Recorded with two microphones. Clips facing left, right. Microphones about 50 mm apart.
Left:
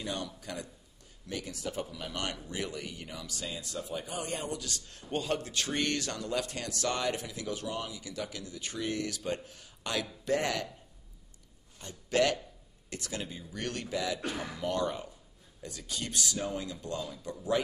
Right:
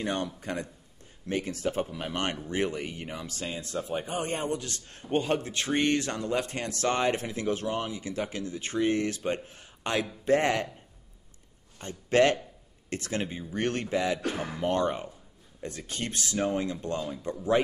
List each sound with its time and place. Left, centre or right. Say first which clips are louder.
0.0 s speech: right 6 dB; right
11.8 s a man's voice: right 5 dB; right